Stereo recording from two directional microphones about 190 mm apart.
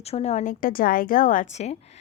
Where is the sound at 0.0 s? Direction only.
35° left (ahead or behind).